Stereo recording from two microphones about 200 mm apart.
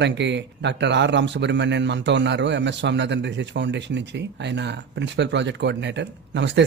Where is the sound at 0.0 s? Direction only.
60° right (ahead or behind).